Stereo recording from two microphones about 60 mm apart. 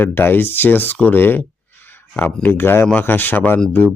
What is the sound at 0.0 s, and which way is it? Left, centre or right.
Speech, left.